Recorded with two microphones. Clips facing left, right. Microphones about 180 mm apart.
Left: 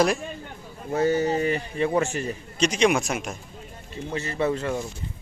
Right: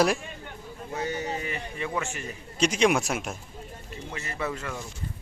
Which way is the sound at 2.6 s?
5° right (ahead or behind).